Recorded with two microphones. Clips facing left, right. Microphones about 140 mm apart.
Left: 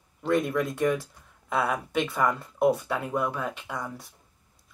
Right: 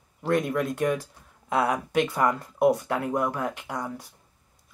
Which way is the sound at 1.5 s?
Centre (ahead or behind).